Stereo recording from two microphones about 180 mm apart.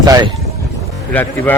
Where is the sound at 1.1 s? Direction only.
10° left (ahead or behind).